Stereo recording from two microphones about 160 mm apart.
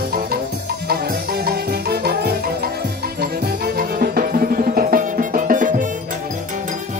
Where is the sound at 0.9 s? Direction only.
90° right; by 5.9 s 55° right (ahead or behind).